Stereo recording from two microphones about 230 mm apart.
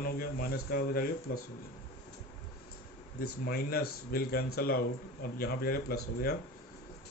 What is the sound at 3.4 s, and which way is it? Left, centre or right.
Speech, left.